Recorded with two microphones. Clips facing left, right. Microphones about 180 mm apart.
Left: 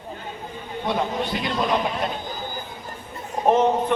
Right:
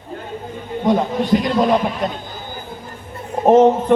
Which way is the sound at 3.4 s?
40° right (ahead or behind).